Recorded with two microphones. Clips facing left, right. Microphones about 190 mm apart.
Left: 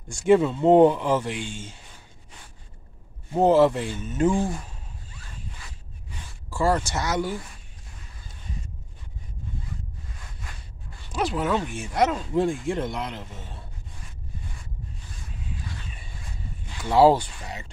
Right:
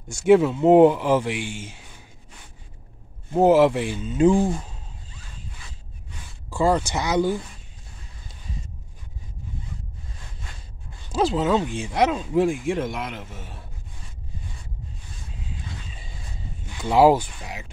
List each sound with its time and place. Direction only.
0.1 s speech: 5° right (ahead or behind)
3.3 s speech: 10° right (ahead or behind)
6.5 s speech: 15° right (ahead or behind)
11.3 s a man's voice: 20° right (ahead or behind)
16.8 s speech: 15° right (ahead or behind)